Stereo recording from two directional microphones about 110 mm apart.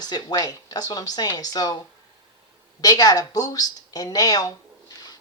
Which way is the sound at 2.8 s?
35° left (ahead or behind).